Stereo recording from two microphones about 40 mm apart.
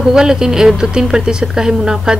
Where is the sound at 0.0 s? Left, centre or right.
Centre.